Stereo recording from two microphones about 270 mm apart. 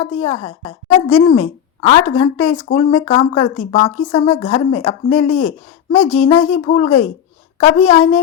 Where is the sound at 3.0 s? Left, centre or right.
Left.